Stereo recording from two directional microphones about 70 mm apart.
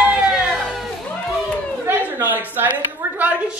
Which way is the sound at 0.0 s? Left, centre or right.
Centre.